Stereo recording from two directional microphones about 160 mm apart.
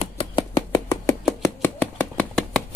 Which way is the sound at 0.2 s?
25° left (ahead or behind).